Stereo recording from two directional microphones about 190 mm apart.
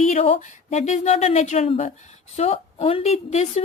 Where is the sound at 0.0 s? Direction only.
35° left (ahead or behind).